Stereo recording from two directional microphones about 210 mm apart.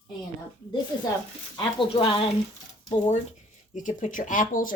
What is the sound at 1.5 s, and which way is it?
Speech, 25° left (ahead or behind).